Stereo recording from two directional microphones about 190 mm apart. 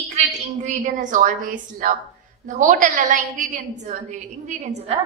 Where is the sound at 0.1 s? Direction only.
40° right (ahead or behind).